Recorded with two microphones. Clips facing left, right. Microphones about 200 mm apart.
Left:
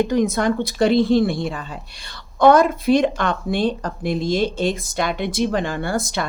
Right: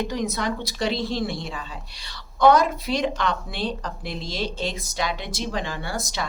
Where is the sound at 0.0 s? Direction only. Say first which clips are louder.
Left 8 dB; 50° left (ahead or behind).